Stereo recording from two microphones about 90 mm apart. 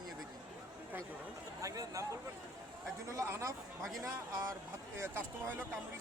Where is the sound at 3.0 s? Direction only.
35° right (ahead or behind).